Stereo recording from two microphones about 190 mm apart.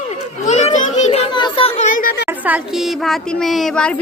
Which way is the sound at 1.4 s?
30° left (ahead or behind).